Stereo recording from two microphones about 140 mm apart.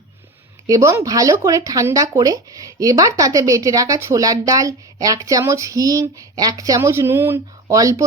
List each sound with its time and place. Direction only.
0.7 s speech: 20° right (ahead or behind)